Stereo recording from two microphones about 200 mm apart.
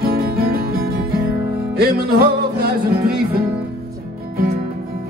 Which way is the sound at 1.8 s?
50° right (ahead or behind).